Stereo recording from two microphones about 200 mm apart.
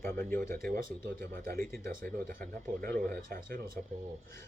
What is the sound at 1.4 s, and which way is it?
Speech, 45° right (ahead or behind).